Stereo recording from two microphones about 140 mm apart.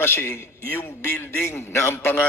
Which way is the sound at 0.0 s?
15° left (ahead or behind).